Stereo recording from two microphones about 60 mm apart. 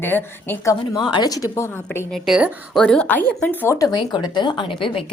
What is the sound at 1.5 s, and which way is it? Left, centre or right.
Speech, left.